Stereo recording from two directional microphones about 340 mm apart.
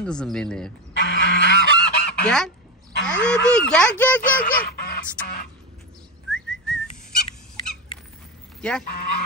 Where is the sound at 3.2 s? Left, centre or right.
Centre.